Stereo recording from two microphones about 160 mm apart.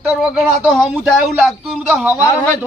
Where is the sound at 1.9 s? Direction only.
15° right (ahead or behind).